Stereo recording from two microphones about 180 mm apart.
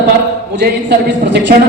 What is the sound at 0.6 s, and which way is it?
Speech, 75° right (ahead or behind).